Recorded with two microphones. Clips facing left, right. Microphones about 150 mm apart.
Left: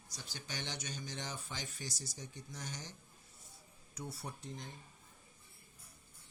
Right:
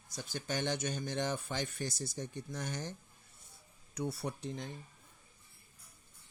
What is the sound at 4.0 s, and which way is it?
Speech, 70° right (ahead or behind).